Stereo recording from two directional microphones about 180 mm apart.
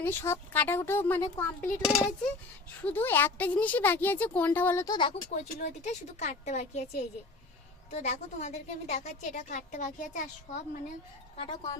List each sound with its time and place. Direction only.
0.0 s a woman's voice: 10° left (ahead or behind)
1.8 s speech: 5° right (ahead or behind)
2.8 s a woman's voice: 10° left (ahead or behind)
5.3 s a woman's voice: 40° left (ahead or behind)
11.3 s speech: 25° left (ahead or behind)